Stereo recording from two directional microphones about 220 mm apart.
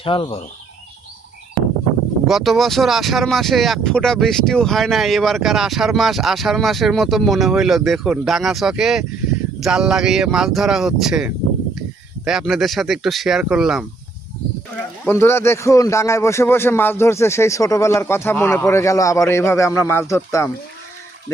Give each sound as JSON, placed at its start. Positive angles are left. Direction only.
{"t": 0.0, "sound": "speech", "side_deg": 25}
{"t": 2.2, "sound": "speech", "side_deg": 0}
{"t": 15.0, "sound": "a man's voice", "side_deg": 10}